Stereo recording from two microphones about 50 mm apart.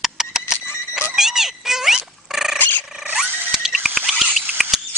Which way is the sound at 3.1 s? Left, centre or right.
Centre.